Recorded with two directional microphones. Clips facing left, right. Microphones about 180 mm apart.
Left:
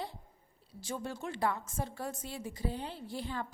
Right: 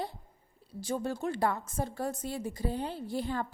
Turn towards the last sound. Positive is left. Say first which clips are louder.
# right 6 dB
turn(degrees=-45)  # may be behind; listen again after turning